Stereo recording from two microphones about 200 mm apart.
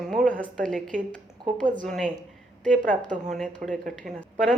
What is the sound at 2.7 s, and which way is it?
A woman's voice, 40° right (ahead or behind).